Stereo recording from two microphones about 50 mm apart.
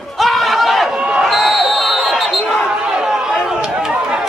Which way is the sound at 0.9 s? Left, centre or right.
Centre.